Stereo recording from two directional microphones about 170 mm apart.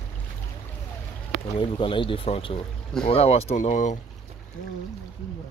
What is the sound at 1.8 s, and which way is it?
Speech, 30° left (ahead or behind).